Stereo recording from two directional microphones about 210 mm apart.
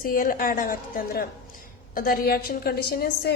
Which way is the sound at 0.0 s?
45° left (ahead or behind).